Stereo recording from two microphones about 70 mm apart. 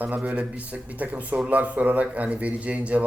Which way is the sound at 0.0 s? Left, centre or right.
Centre.